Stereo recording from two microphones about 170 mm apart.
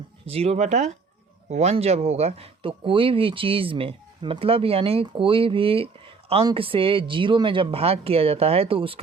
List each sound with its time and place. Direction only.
0.3 s speech: 35° right (ahead or behind)